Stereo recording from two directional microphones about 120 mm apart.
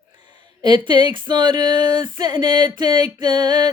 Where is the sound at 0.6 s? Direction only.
40° right (ahead or behind).